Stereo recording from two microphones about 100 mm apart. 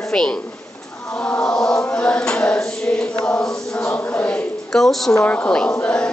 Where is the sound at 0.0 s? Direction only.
5° left (ahead or behind).